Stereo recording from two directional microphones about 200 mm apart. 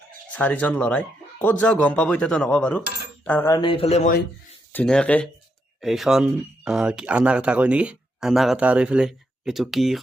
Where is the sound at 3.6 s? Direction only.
30° left (ahead or behind).